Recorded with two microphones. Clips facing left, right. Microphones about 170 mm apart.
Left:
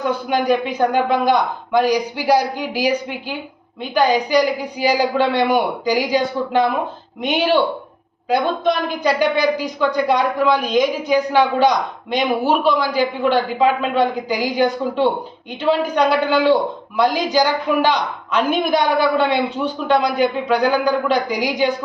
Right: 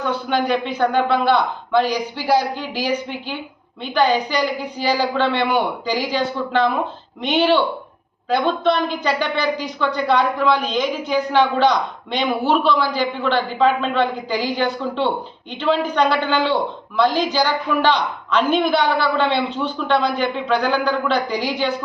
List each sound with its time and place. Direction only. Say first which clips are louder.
0.0 s speech: left 2 dB; 10° left (ahead or behind)